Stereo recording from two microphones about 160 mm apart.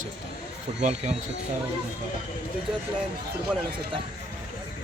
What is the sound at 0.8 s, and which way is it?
Speech, 45° right (ahead or behind).